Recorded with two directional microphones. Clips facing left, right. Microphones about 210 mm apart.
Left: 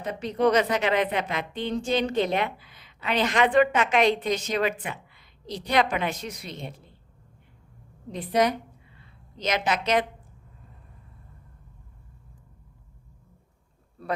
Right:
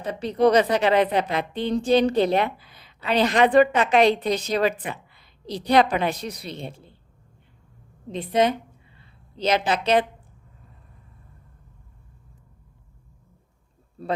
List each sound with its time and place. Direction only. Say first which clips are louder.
0.0 s a woman's voice: right 4 dB; 35° right (ahead or behind)
8.1 s a woman's voice: right 2 dB; 25° right (ahead or behind)